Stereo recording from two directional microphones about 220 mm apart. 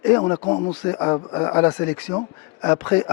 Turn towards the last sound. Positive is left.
turn(degrees=15)  # may be behind; listen again after turning